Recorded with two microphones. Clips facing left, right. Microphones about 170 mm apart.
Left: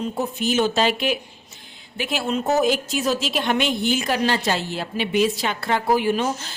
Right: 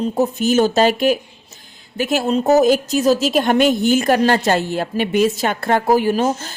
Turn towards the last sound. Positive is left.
turn(degrees=-45)  # may be behind; listen again after turning